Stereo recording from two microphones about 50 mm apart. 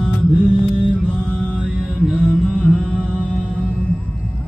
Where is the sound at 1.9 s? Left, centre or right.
Centre.